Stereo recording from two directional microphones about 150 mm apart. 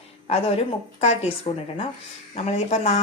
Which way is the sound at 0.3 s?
45° left (ahead or behind).